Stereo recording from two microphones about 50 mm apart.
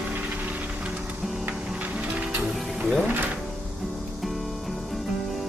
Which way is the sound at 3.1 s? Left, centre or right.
Right.